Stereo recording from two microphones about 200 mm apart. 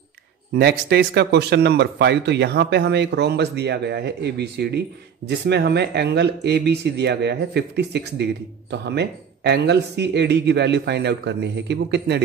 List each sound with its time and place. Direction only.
0.6 s speech: 55° right (ahead or behind)